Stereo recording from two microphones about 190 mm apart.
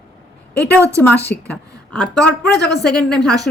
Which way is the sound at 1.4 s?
5° left (ahead or behind).